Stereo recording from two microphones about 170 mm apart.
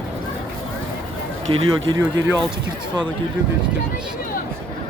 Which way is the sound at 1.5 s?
20° right (ahead or behind).